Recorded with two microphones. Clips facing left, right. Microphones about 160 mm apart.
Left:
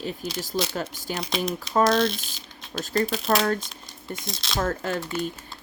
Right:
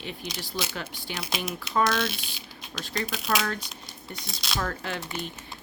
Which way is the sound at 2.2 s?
45° left (ahead or behind).